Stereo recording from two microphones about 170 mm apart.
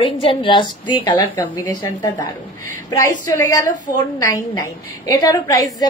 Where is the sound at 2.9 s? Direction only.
20° left (ahead or behind).